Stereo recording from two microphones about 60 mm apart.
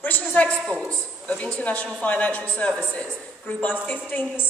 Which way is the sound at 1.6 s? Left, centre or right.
Left.